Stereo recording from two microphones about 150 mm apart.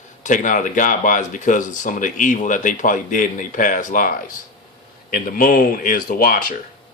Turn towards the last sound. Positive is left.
turn(degrees=75)  # may be behind; listen again after turning